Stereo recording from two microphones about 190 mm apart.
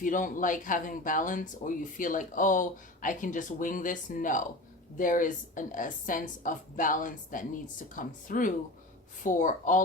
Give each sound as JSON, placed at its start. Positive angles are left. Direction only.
{"t": 0.0, "sound": "speech", "side_deg": 45}